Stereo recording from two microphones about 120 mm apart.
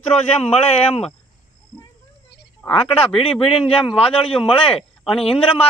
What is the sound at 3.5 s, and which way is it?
A man's voice, 50° left (ahead or behind).